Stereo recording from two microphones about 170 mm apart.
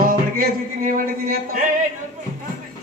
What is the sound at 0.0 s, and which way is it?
Music, 55° right (ahead or behind).